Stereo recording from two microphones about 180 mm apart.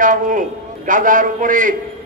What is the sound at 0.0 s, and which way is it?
A man's voice, 45° right (ahead or behind).